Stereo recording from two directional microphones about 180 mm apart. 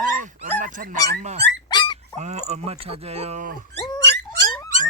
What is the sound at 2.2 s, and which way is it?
Speech, 40° right (ahead or behind).